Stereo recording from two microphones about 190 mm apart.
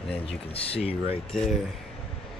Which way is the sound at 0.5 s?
30° left (ahead or behind).